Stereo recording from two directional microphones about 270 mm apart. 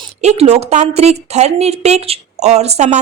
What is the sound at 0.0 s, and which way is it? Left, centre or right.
A woman's voice, right.